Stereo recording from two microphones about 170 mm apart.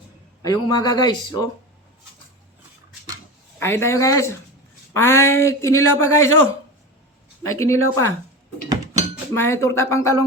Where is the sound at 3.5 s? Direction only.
15° left (ahead or behind).